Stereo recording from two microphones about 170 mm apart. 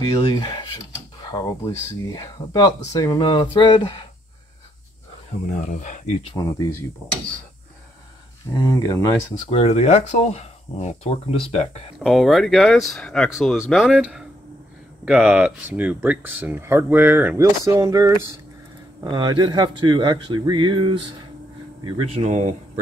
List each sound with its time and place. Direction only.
0.3 s speech: 25° left (ahead or behind)
5.7 s speech: 45° left (ahead or behind)
6.2 s speech: 20° left (ahead or behind)
8.5 s speech: 20° left (ahead or behind)
9.5 s speech: 35° left (ahead or behind)
12.0 s speech: centre (ahead or behind); by 22.6 s 45° right (ahead or behind)